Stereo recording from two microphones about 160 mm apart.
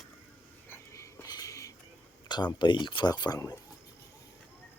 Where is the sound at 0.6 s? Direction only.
15° left (ahead or behind).